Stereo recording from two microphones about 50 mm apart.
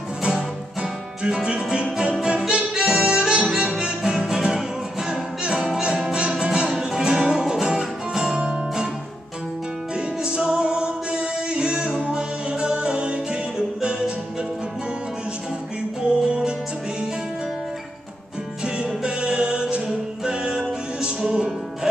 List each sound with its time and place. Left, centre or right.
1.2 s music: centre
10.2 s music: centre
16.0 s music: centre
18.8 s music: centre